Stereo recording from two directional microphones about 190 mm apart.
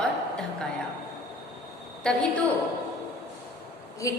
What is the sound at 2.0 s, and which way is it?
Speech, 5° left (ahead or behind).